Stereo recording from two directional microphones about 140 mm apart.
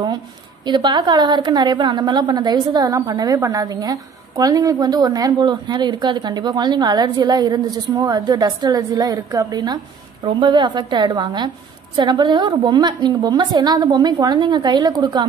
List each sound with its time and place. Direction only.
0.7 s a woman's voice: 35° right (ahead or behind)